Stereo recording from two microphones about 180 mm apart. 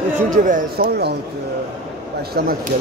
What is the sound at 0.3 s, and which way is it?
Speech, 50° right (ahead or behind).